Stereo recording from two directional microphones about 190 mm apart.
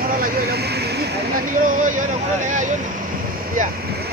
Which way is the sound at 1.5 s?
45° right (ahead or behind).